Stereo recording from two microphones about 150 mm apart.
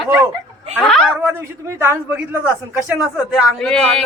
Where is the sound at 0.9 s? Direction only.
Centre (ahead or behind).